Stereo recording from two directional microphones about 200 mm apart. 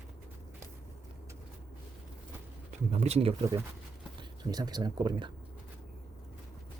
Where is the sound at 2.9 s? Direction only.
30° right (ahead or behind).